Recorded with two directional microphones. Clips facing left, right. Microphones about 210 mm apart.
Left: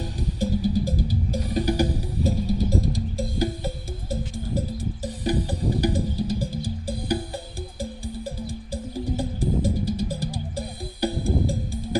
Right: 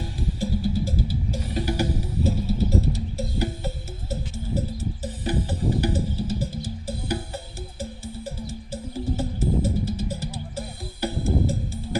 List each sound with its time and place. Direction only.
0.0 s music: 20° left (ahead or behind)
5.8 s music: 15° left (ahead or behind)